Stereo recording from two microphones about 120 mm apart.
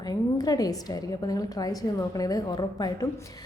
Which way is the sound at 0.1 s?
30° left (ahead or behind).